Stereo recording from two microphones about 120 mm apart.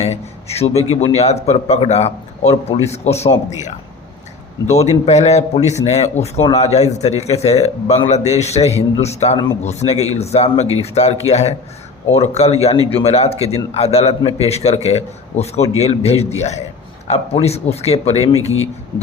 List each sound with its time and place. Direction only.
0.0 s speech: 60° left (ahead or behind)
4.6 s a man's voice: 65° left (ahead or behind)
17.3 s speech: 60° left (ahead or behind)